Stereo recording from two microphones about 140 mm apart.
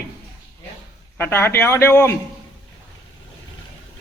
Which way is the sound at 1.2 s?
15° left (ahead or behind).